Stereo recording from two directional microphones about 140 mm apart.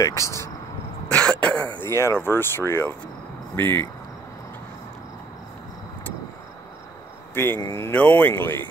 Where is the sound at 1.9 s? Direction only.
20° left (ahead or behind).